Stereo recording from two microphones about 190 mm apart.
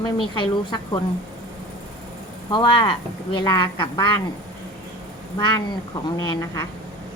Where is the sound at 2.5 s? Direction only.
25° left (ahead or behind).